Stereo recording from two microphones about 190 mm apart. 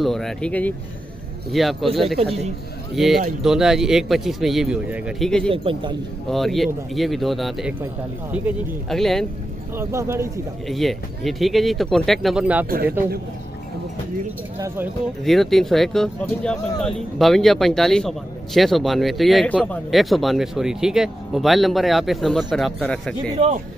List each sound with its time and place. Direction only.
0.0 s speech: centre (ahead or behind)
3.4 s speech: centre (ahead or behind)
5.5 s speech: 30° right (ahead or behind)
6.3 s speech: centre (ahead or behind)
8.8 s speech: centre (ahead or behind)
9.8 s speech: 15° right (ahead or behind)
10.7 s speech: centre (ahead or behind)
15.2 s speech: centre (ahead or behind)
23.3 s speech: 35° right (ahead or behind)